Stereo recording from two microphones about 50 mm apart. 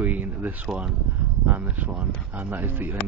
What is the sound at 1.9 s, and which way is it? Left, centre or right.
Speech, right.